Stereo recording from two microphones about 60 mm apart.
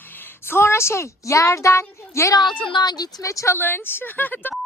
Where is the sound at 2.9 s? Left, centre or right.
Left.